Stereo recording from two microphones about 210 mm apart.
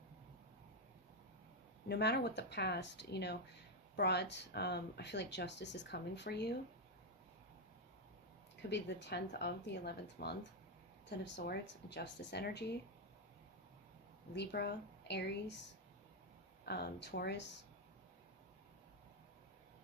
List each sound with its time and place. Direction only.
1.9 s speech: 50° left (ahead or behind)
8.7 s speech: 55° left (ahead or behind)
14.3 s speech: 50° left (ahead or behind)
16.6 s speech: 50° left (ahead or behind)